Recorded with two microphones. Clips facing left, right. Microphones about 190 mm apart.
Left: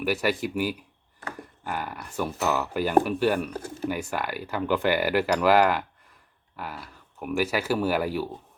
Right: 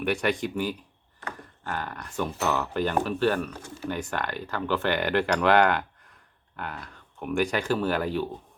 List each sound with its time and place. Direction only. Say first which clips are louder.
0.0 s speech: even; 5° left (ahead or behind)
3.5 s speech: left 6 dB; 40° left (ahead or behind)
3.8 s speech: left 1 dB; 10° left (ahead or behind)